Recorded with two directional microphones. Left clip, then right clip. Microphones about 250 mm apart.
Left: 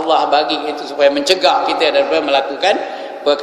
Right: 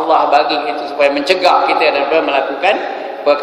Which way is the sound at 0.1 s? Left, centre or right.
Left.